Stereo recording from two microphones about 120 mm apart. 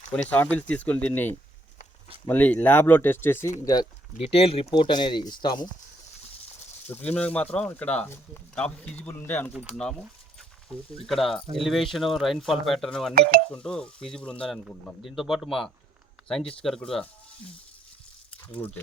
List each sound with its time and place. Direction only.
0.1 s speech: 10° left (ahead or behind)
3.6 s speech: 30° left (ahead or behind)
4.1 s speech: 60° left (ahead or behind)
4.7 s speech: 40° left (ahead or behind)
6.8 s speech: 15° left (ahead or behind)
15.0 s speech: 5° right (ahead or behind)
18.4 s speech: 10° left (ahead or behind)